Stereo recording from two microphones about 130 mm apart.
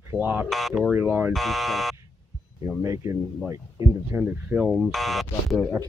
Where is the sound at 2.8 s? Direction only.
25° right (ahead or behind); by 5.7 s centre (ahead or behind).